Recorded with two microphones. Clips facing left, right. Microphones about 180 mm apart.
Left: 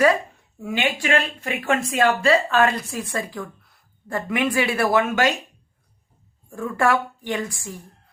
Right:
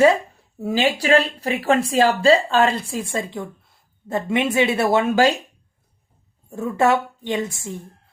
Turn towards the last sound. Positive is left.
turn(degrees=-25)  # may be behind; listen again after turning